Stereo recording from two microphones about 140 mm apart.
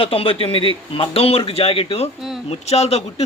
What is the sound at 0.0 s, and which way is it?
A man's voice, 45° left (ahead or behind).